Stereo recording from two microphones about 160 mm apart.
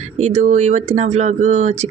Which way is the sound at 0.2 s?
45° right (ahead or behind).